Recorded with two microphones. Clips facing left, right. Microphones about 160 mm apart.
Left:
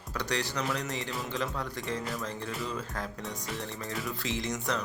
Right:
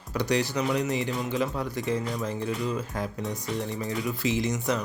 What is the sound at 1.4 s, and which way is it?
Speech, 15° right (ahead or behind).